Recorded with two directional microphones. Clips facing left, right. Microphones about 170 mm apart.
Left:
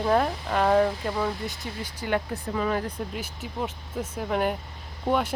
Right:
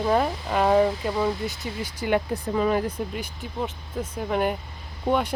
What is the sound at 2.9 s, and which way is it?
Speech, 5° left (ahead or behind).